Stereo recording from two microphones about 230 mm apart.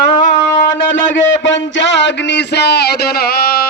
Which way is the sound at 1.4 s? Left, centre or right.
Left.